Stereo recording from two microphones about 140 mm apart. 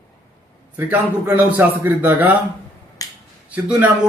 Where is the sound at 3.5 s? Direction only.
10° right (ahead or behind).